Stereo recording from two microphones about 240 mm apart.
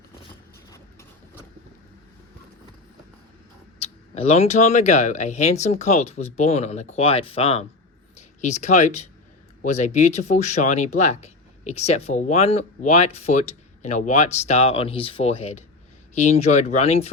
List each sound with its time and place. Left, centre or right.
0.7 s vehicle: centre
3.8 s speech: left